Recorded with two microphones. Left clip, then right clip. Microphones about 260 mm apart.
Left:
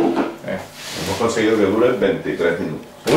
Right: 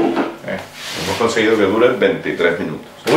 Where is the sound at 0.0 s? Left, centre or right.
Centre.